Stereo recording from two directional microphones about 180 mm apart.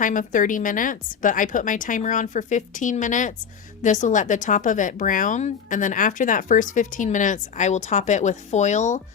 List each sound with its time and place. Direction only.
0.0 s speech: 45° left (ahead or behind)